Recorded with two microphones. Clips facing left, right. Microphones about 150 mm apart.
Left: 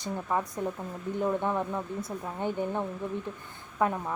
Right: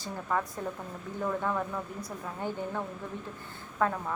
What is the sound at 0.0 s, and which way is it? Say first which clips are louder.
Speech: left 2 dB; 20° left (ahead or behind).